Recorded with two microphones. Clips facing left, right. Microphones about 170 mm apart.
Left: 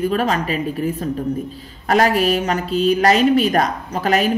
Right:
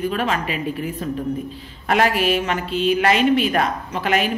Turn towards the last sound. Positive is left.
turn(degrees=40)  # may be behind; listen again after turning